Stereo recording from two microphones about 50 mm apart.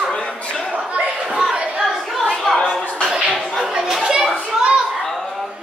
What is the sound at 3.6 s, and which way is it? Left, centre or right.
Children playing, centre.